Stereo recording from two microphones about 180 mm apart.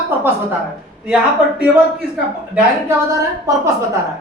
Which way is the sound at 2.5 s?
15° right (ahead or behind).